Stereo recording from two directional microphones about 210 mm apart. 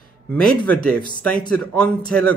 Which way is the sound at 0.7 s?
5° left (ahead or behind).